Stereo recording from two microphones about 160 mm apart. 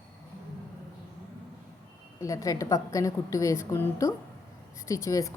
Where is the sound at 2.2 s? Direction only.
20° left (ahead or behind).